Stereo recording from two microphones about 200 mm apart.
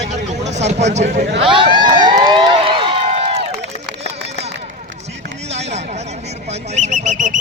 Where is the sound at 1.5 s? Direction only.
25° right (ahead or behind).